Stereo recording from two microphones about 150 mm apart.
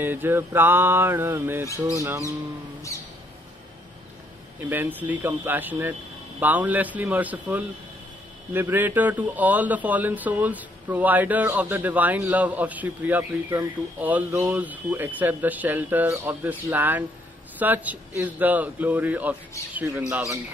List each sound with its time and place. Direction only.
0.0 s a man's voice: 15° right (ahead or behind)
2.0 s bird: 20° right (ahead or behind)
4.6 s a man's voice: 15° right (ahead or behind)